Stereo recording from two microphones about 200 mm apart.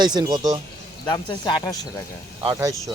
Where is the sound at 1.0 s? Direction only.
20° left (ahead or behind).